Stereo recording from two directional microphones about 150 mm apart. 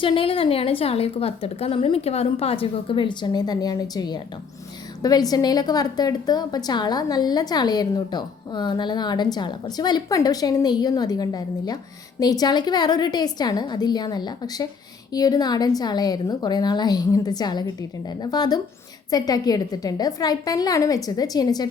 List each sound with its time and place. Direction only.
0.0 s a woman's voice: 35° left (ahead or behind)